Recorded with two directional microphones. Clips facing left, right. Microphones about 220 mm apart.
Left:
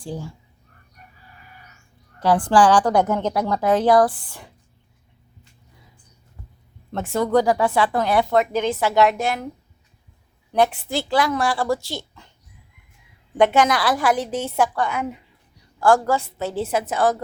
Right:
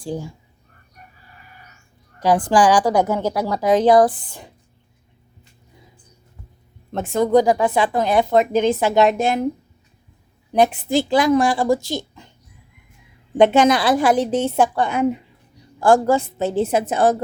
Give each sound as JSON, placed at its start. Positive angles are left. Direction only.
{"t": 0.0, "sound": "a woman's voice", "side_deg": -15}
{"t": 2.1, "sound": "a woman's voice", "side_deg": -15}
{"t": 6.9, "sound": "speech", "side_deg": -20}
{"t": 10.5, "sound": "a woman's voice", "side_deg": -15}
{"t": 13.3, "sound": "speech", "side_deg": -25}